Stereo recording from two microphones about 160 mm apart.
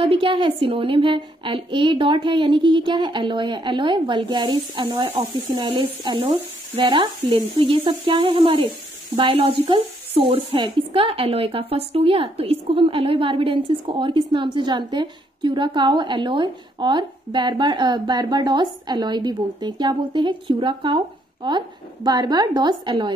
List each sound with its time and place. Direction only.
0.0 s a woman's voice: 35° right (ahead or behind)